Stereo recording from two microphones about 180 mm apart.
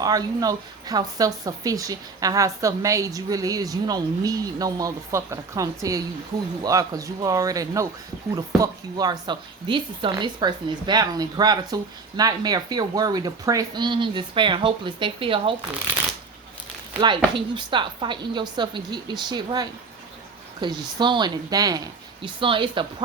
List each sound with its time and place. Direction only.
0.0 s a woman's voice: 20° right (ahead or behind)
17.3 s a woman's voice: 25° right (ahead or behind)